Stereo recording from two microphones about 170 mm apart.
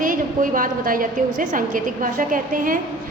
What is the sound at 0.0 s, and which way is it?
A woman's voice, 50° right (ahead or behind).